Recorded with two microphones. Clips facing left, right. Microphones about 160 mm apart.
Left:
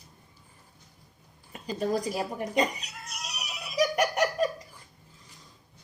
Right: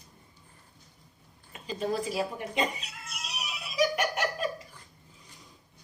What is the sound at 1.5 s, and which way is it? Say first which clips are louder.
Cat: left 3 dB; 40° left (ahead or behind).